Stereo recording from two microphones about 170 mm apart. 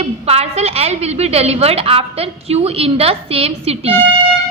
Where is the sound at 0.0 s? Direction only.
35° right (ahead or behind).